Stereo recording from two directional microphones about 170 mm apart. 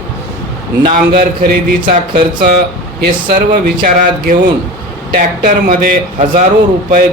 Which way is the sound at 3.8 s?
55° right (ahead or behind).